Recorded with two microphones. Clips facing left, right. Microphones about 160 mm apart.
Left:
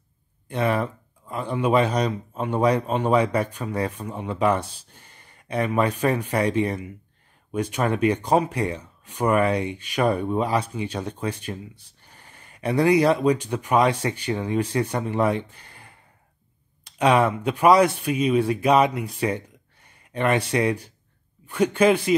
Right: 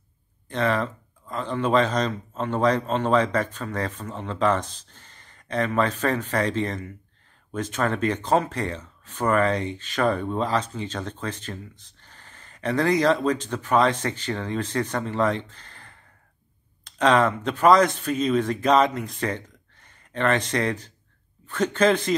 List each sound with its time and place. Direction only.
0.5 s speech: 10° left (ahead or behind)